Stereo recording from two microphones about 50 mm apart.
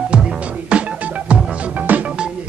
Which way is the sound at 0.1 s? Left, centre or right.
Right.